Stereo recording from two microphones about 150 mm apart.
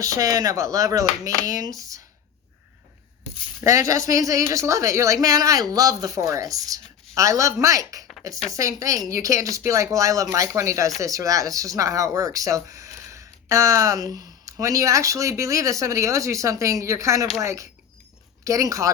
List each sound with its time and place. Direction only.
0.0 s speech: 25° right (ahead or behind)
3.6 s speech: 20° right (ahead or behind)